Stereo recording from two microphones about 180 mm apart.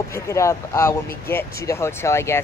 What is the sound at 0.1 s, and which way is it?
Speech, 15° left (ahead or behind).